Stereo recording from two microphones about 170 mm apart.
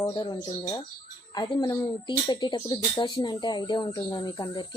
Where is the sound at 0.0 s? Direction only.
25° left (ahead or behind).